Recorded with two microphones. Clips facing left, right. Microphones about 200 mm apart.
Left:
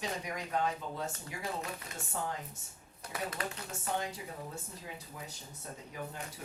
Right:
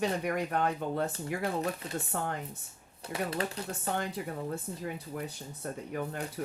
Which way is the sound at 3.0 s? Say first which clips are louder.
Right 6 dB; 30° right (ahead or behind).